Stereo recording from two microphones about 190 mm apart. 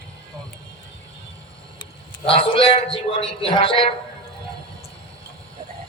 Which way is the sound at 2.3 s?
30° left (ahead or behind).